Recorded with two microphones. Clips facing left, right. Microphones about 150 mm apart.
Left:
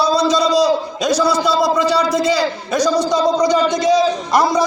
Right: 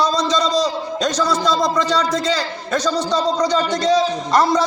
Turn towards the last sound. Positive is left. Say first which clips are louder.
# left 1 dB
turn(degrees=10)  # may be behind; listen again after turning